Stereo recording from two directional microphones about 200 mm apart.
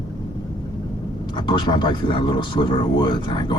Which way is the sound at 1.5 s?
20° left (ahead or behind).